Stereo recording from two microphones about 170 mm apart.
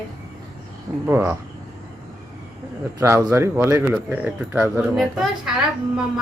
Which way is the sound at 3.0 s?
15° right (ahead or behind).